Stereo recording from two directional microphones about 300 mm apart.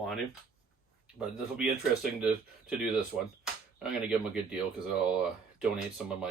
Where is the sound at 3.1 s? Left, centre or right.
Centre.